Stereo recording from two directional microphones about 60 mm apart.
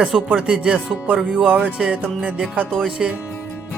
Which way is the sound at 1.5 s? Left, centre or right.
Centre.